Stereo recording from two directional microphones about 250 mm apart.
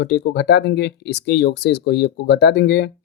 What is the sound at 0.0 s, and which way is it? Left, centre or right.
Speech, left.